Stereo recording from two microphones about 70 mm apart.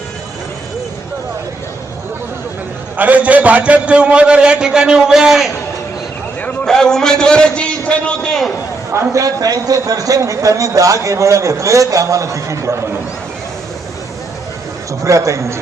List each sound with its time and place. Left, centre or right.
3.0 s a man's voice: right; by 5.5 s centre
6.7 s a man's voice: centre
8.9 s a man's voice: right
15.0 s a man's voice: right